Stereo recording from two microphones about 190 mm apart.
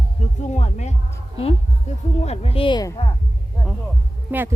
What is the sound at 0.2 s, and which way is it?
Music, 35° left (ahead or behind).